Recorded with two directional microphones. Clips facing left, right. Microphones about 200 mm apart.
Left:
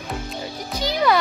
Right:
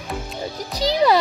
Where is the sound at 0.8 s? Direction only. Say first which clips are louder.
Right 3 dB; 35° right (ahead or behind).